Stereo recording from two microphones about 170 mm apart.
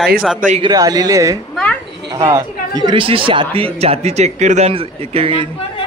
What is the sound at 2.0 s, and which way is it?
Speech, 20° right (ahead or behind).